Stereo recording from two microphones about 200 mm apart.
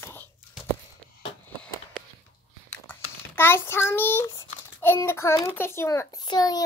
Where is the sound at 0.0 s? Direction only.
10° left (ahead or behind).